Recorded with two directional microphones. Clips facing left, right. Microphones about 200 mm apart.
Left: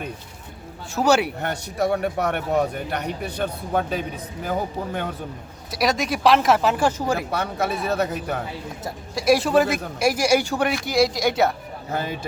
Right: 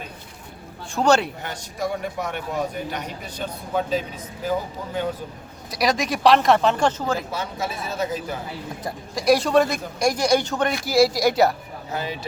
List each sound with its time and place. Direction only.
0.9 s a man's voice: 10° left (ahead or behind)
1.4 s a man's voice: 60° left (ahead or behind)
5.7 s a man's voice: centre (ahead or behind)
7.2 s a man's voice: 60° left (ahead or behind)
8.8 s a man's voice: centre (ahead or behind)
10.8 s a man's voice: centre (ahead or behind)
11.9 s speech: 50° left (ahead or behind)